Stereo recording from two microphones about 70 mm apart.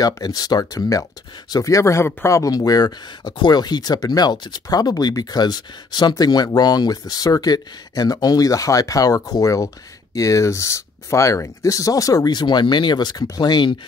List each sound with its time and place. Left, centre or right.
0.0 s speech: left